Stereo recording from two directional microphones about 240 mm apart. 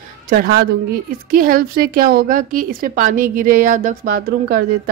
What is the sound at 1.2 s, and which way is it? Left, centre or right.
Speech, right.